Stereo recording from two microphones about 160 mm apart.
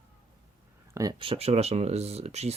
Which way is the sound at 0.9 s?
25° right (ahead or behind).